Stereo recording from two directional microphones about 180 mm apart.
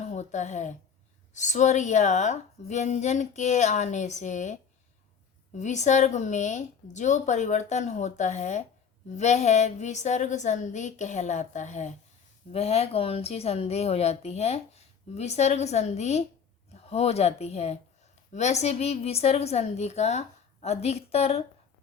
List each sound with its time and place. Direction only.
0.0 s a woman's voice: 40° left (ahead or behind)
5.5 s a woman's voice: 40° left (ahead or behind)